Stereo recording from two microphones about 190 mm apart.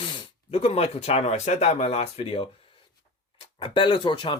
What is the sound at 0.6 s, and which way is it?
Speech, 35° left (ahead or behind).